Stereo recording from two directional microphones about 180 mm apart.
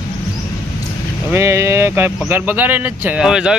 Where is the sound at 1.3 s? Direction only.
15° right (ahead or behind).